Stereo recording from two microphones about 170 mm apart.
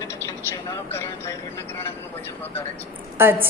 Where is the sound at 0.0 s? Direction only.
20° left (ahead or behind).